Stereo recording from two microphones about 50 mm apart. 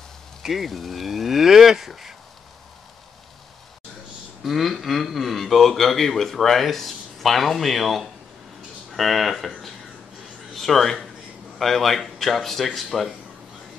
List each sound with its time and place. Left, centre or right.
0.4 s a man's voice: centre
4.4 s a man's voice: centre